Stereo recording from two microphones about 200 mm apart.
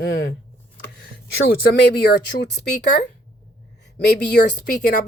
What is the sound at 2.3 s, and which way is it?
Speech, 45° left (ahead or behind).